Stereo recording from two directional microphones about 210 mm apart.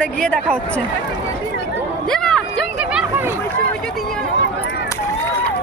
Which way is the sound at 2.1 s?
5° left (ahead or behind).